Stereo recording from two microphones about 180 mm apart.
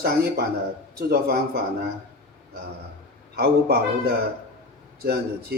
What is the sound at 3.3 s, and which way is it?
A man's voice, 60° right (ahead or behind).